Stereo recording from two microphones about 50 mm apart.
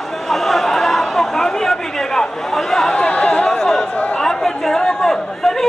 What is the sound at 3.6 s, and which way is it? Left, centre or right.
Chatter, centre.